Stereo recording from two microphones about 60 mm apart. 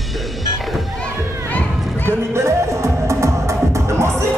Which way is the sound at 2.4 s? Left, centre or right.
Right.